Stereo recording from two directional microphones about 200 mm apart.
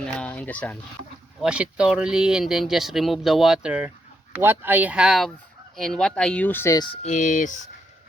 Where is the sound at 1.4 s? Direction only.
5° right (ahead or behind); by 6.8 s 15° left (ahead or behind).